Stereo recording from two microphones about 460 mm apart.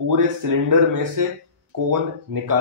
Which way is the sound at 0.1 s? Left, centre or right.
Right.